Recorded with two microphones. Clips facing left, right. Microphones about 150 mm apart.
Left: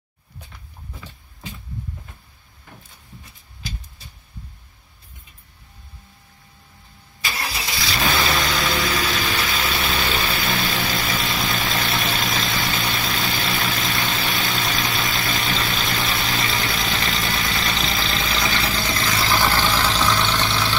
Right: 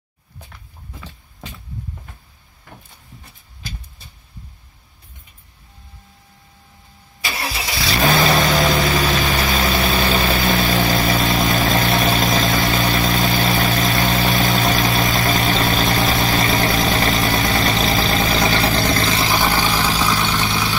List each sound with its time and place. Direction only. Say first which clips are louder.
8.0 s vehicle: right 6 dB; 45° right (ahead or behind)
19.0 s vehicle: right 2 dB; 20° right (ahead or behind)